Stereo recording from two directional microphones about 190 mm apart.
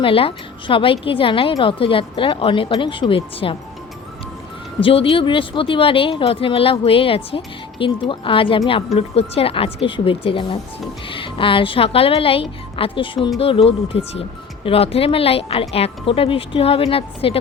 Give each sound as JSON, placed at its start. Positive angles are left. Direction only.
{"t": 0.0, "sound": "a woman's voice", "side_deg": 30}
{"t": 4.8, "sound": "a woman's voice", "side_deg": 30}